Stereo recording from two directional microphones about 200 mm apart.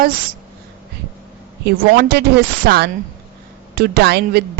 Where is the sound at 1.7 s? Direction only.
55° right (ahead or behind).